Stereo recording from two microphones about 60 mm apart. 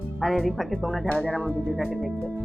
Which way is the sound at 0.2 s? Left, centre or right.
Centre.